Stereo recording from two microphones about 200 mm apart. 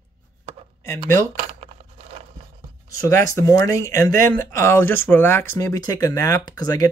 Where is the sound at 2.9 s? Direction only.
15° left (ahead or behind).